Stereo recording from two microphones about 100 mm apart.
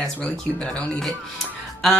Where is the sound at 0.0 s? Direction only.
10° left (ahead or behind).